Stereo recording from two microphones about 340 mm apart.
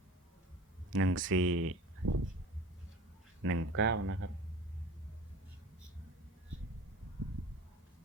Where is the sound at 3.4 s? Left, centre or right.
Right.